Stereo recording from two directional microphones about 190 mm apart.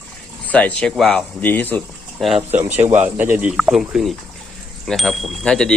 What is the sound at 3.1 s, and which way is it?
Speech, 10° right (ahead or behind).